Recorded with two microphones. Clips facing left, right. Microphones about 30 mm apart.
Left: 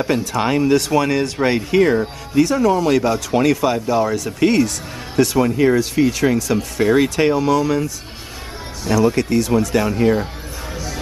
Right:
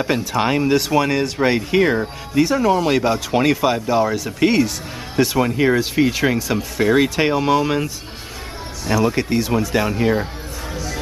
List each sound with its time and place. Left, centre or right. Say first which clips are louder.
0.0 s speech: even; centre
7.3 s speech: even; right
8.8 s speech: left 2 dB; centre
10.7 s music: right 1 dB; centre